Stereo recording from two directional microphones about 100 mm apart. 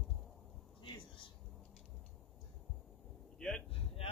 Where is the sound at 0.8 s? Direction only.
55° left (ahead or behind).